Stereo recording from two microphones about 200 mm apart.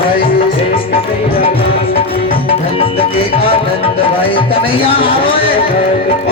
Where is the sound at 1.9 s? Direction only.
25° left (ahead or behind).